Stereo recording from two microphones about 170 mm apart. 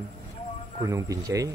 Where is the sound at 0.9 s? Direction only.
20° right (ahead or behind).